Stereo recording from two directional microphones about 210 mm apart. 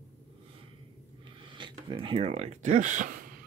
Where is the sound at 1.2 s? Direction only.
20° right (ahead or behind); by 3.2 s 35° right (ahead or behind).